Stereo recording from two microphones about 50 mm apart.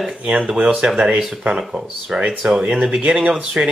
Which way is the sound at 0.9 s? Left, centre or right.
Centre.